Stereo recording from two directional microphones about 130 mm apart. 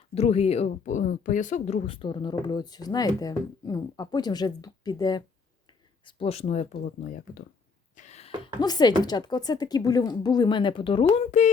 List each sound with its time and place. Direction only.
0.1 s speech: 55° left (ahead or behind); by 1.8 s 70° left (ahead or behind)
1.9 s speech: 40° left (ahead or behind)
6.1 s speech: 45° left (ahead or behind); by 7.2 s 80° left
7.9 s a sound: 60° left (ahead or behind)
8.6 s speech: 30° left (ahead or behind)